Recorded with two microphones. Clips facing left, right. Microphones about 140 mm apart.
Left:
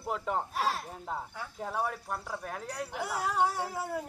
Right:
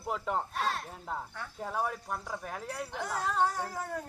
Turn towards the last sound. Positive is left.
turn(degrees=10)  # may be behind; listen again after turning